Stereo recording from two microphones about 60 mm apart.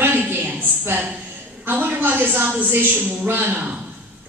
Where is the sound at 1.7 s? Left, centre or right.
Right.